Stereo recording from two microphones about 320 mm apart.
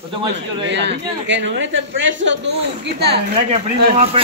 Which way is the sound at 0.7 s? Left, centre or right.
Right.